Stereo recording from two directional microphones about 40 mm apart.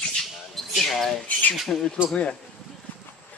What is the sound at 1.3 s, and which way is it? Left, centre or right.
Speech, left.